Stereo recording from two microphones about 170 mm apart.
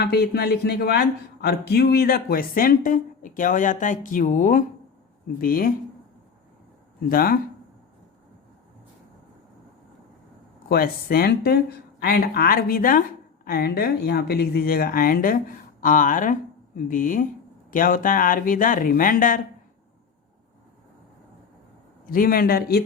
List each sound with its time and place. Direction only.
0.0 s speech: 75° left (ahead or behind); by 5.7 s 55° left (ahead or behind)
7.1 s speech: 60° left (ahead or behind)
10.7 s speech: 60° left (ahead or behind)
22.0 s speech: 55° left (ahead or behind)